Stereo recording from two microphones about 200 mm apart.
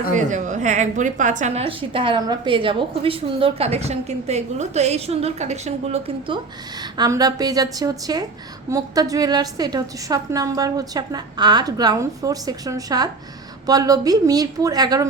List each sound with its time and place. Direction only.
0.1 s a woman's voice: 40° right (ahead or behind); by 15.0 s 20° right (ahead or behind)